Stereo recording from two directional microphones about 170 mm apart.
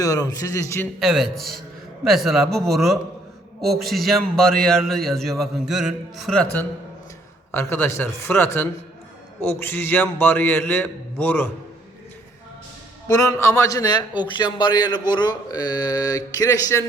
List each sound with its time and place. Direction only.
0.0 s a man's voice: 20° left (ahead or behind)
0.9 s a man's voice: centre (ahead or behind)
13.1 s a man's voice: 20° left (ahead or behind)